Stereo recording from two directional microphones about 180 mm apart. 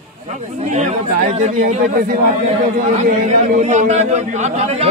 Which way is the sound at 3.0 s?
40° right (ahead or behind).